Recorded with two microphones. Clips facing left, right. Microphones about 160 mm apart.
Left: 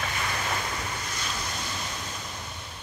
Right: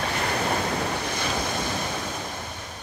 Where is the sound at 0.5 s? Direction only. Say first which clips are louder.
Right 7 dB; 65° right (ahead or behind).